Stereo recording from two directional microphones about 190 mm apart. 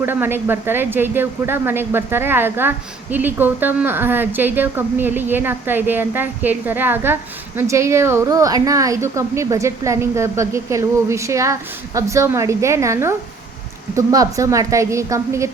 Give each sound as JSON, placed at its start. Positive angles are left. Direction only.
{"t": 0.0, "sound": "speech", "side_deg": -10}